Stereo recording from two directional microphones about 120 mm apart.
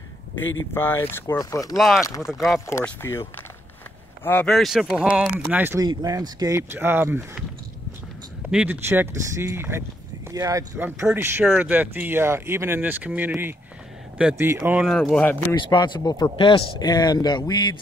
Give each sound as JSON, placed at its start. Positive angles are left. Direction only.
{"t": 0.7, "sound": "speech", "side_deg": 20}
{"t": 1.8, "sound": "speech", "side_deg": 0}
{"t": 2.0, "sound": "speech", "side_deg": 30}
{"t": 2.3, "sound": "speech", "side_deg": 0}
{"t": 3.0, "sound": "speech", "side_deg": 20}
{"t": 4.5, "sound": "speech", "side_deg": 0}
{"t": 5.8, "sound": "speech", "side_deg": -30}
{"t": 8.5, "sound": "speech", "side_deg": -10}
{"t": 8.8, "sound": "speech", "side_deg": -20}
{"t": 10.8, "sound": "speech", "side_deg": -15}
{"t": 14.9, "sound": "speech", "side_deg": 5}
{"t": 15.7, "sound": "speech", "side_deg": 35}
{"t": 16.3, "sound": "speech", "side_deg": 45}